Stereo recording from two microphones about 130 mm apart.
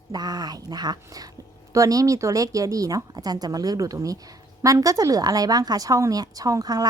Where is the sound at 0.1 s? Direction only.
30° right (ahead or behind).